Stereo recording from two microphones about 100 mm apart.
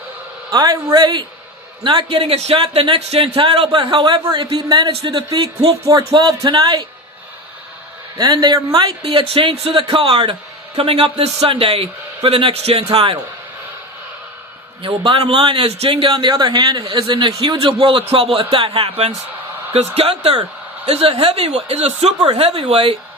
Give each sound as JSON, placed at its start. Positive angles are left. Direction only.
{"t": 0.5, "sound": "a man's voice", "side_deg": -40}
{"t": 2.0, "sound": "a man's voice", "side_deg": -70}
{"t": 5.8, "sound": "a man's voice", "side_deg": -35}
{"t": 8.2, "sound": "a man's voice", "side_deg": -45}
{"t": 9.0, "sound": "a man's voice", "side_deg": -70}
{"t": 10.8, "sound": "a man's voice", "side_deg": -70}
{"t": 14.8, "sound": "a man's voice", "side_deg": -60}